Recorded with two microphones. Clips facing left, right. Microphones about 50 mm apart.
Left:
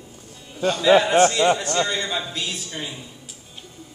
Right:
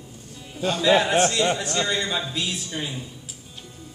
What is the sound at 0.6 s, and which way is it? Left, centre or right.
A man's voice, centre.